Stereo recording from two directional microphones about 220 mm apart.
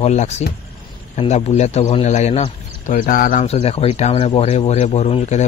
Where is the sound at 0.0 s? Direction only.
30° left (ahead or behind).